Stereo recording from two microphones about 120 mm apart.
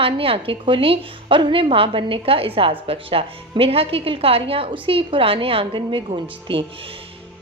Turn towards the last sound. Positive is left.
turn(degrees=-45)  # may be behind; listen again after turning